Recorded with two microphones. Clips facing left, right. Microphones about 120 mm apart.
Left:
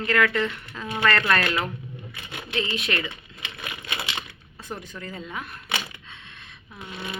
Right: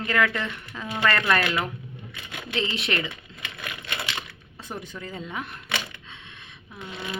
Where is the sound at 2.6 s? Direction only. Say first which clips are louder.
Even; 30° right (ahead or behind).